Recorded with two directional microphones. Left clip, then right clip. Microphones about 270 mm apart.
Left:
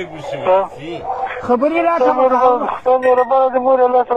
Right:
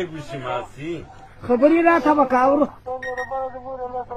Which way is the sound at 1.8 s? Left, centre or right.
Left.